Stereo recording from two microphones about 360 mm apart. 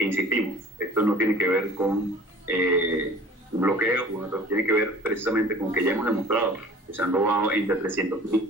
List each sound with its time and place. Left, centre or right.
0.0 s a man's voice: centre